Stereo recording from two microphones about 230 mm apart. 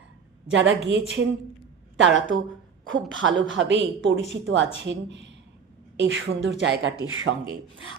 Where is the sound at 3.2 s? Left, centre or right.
Right.